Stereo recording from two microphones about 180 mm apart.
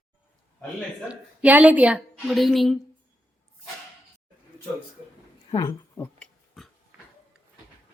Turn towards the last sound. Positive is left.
turn(degrees=5)  # may be behind; listen again after turning